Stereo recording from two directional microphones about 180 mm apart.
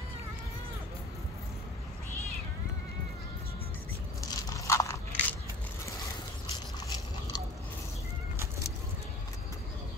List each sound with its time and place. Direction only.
4.3 s crushing: 20° left (ahead or behind)